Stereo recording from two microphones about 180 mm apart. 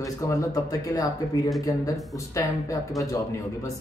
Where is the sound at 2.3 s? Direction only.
20° left (ahead or behind).